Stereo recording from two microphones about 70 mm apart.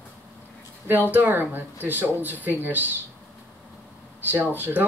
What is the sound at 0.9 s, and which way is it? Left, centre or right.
Speech, right.